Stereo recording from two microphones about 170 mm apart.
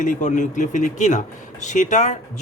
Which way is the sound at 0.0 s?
45° left (ahead or behind).